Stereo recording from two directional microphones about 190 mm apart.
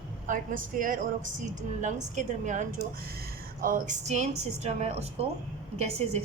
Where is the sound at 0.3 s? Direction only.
45° right (ahead or behind).